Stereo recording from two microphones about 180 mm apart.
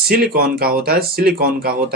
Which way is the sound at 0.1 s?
55° right (ahead or behind).